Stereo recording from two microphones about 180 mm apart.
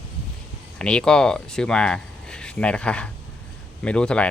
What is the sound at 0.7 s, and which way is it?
Speech, 5° left (ahead or behind).